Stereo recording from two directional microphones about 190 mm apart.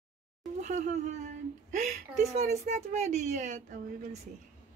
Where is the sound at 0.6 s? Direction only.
40° right (ahead or behind).